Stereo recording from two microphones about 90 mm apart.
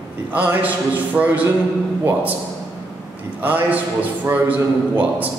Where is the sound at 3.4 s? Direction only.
20° right (ahead or behind).